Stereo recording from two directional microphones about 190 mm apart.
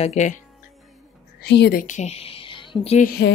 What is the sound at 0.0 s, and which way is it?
Speech, 40° left (ahead or behind).